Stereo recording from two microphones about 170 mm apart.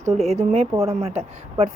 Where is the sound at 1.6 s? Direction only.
45° right (ahead or behind).